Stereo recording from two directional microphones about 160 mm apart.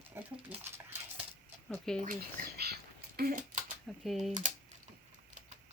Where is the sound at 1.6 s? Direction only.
5° left (ahead or behind).